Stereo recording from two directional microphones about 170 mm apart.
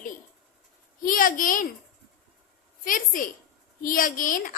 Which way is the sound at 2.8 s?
55° left (ahead or behind).